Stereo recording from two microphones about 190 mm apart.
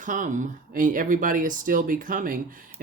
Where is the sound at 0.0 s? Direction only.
45° right (ahead or behind).